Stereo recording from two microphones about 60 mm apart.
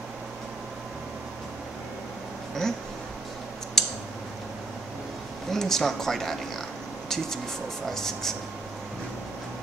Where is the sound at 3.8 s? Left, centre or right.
Centre.